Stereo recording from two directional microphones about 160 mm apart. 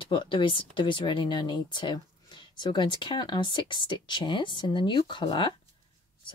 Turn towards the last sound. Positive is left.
turn(degrees=30)  # may be behind; listen again after turning